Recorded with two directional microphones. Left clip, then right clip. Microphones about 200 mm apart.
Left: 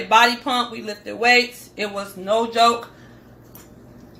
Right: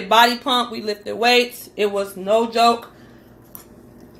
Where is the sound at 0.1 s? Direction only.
35° right (ahead or behind).